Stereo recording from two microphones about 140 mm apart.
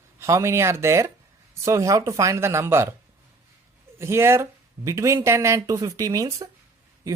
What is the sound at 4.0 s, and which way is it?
Speech, 20° right (ahead or behind).